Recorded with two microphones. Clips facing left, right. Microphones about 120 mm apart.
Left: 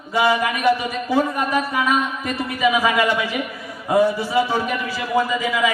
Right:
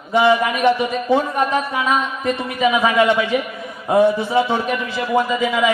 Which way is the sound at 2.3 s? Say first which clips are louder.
Left 1 dB; 20° right (ahead or behind).